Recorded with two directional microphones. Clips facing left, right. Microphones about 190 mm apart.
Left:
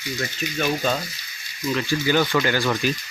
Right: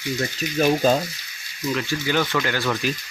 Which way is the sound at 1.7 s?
Centre (ahead or behind).